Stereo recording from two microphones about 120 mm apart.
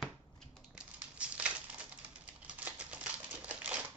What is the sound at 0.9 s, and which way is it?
Crumpling, 10° right (ahead or behind).